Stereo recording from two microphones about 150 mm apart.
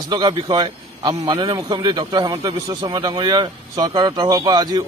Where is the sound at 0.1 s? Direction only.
30° right (ahead or behind).